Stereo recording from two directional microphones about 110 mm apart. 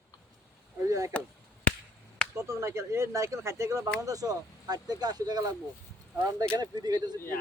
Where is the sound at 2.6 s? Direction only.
25° right (ahead or behind).